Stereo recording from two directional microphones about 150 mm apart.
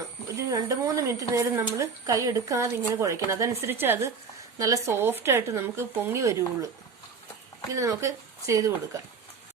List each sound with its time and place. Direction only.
0.3 s a woman's voice: 25° right (ahead or behind)
7.7 s a woman's voice: 20° right (ahead or behind)